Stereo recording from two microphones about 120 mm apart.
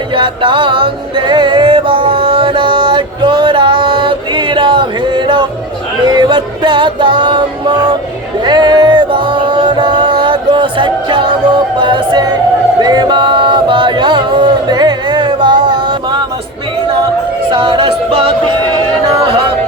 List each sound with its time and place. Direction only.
0.2 s music: 45° right (ahead or behind)
12.8 s chant: 35° right (ahead or behind)
17.5 s music: 45° right (ahead or behind)